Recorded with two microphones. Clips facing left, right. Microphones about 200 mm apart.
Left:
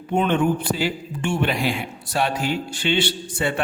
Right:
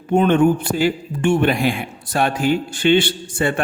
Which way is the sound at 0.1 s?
45° right (ahead or behind).